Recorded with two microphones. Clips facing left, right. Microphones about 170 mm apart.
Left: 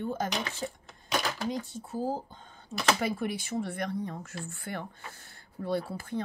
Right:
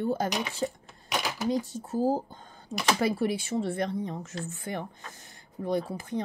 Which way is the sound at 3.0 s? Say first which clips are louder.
Right 4 dB; 30° right (ahead or behind).